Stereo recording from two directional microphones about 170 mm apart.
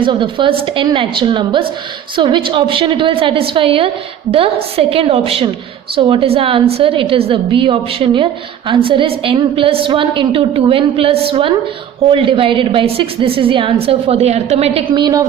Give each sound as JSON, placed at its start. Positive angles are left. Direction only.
{"t": 0.0, "sound": "a woman's voice", "side_deg": -30}